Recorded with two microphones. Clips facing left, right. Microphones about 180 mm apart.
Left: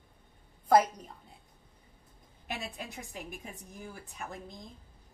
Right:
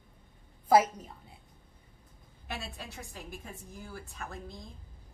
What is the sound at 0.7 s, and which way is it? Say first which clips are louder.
Speech: even; 5° right (ahead or behind).